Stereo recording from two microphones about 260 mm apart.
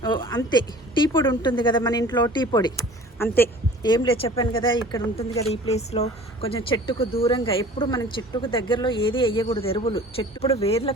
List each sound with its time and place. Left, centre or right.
0.0 s a woman's voice: centre